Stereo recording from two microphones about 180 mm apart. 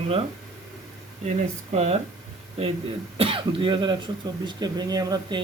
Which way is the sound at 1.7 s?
35° right (ahead or behind).